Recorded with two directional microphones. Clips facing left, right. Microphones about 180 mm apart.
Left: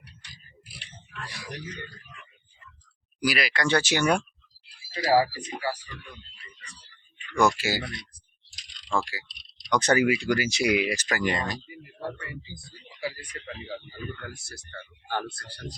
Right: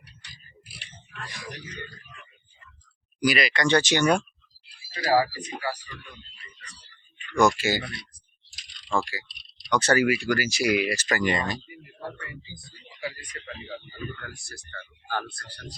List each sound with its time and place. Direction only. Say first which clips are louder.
3.2 s speech: right 3 dB; 5° left (ahead or behind)
4.9 s speech: left 1 dB; 30° left (ahead or behind)
7.3 s speech: right 2 dB; 5° left (ahead or behind)
8.9 s speech: right 1 dB; 10° right (ahead or behind)
9.7 s speech: even; 15° left (ahead or behind)
11.2 s speech: right 2 dB; centre (ahead or behind)
15.3 s speech: left 3 dB; 25° left (ahead or behind)